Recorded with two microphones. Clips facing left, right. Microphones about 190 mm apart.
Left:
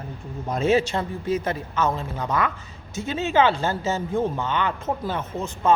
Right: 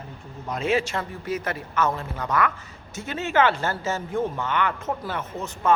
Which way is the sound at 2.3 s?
25° left (ahead or behind).